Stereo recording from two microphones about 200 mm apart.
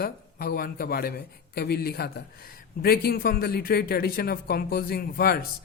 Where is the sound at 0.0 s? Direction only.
45° left (ahead or behind).